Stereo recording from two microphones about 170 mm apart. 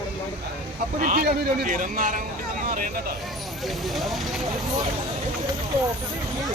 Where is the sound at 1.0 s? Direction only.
55° right (ahead or behind).